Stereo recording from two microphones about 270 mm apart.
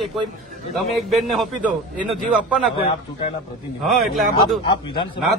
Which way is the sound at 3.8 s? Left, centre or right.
Centre.